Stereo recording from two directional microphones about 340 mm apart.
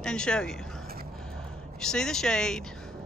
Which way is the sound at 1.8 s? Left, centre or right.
Centre.